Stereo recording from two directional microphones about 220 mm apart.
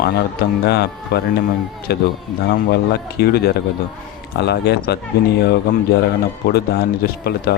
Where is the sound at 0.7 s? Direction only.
45° left (ahead or behind).